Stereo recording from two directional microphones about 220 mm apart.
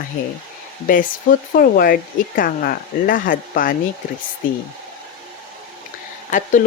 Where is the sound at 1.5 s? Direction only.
40° left (ahead or behind).